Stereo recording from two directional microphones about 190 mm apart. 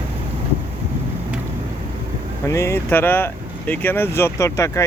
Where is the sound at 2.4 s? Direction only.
15° left (ahead or behind).